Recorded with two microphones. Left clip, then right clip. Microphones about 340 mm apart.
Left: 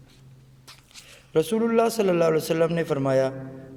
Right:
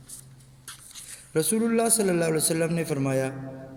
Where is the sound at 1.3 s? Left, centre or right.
Centre.